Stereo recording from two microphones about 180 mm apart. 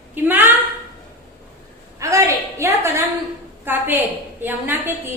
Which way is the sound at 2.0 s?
15° right (ahead or behind).